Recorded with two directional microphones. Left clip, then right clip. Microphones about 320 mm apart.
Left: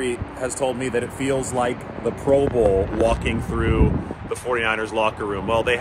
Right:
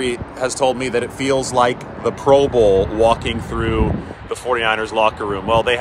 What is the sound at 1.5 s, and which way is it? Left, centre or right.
Speech, right.